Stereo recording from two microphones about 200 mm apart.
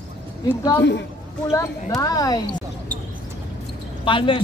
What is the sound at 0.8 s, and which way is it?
Speech, 60° left (ahead or behind).